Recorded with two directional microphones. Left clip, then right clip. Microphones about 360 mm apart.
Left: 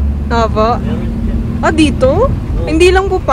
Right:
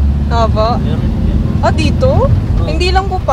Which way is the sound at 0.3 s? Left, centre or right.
Centre.